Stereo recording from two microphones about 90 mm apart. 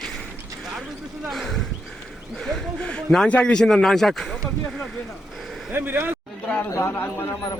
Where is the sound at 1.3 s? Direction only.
Centre (ahead or behind).